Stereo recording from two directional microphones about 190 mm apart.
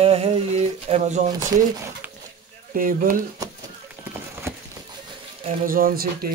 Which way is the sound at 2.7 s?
45° right (ahead or behind).